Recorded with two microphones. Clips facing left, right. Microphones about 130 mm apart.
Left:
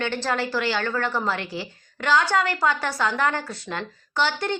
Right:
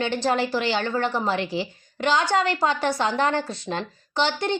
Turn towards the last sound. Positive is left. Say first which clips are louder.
# right 1 dB
turn(degrees=-20)  # may be behind; listen again after turning